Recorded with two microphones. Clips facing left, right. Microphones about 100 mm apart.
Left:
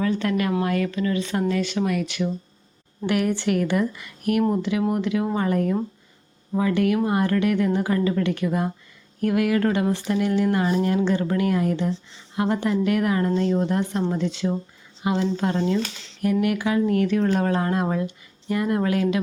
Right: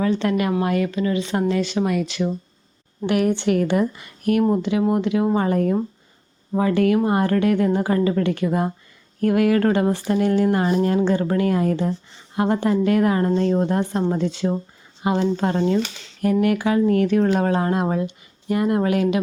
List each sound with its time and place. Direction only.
0.0 s speech: 25° right (ahead or behind)